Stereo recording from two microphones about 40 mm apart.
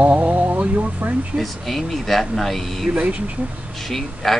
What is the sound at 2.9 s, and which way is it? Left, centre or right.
Speech, right.